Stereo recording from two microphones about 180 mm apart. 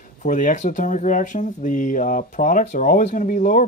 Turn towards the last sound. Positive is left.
turn(degrees=45)  # may be behind; listen again after turning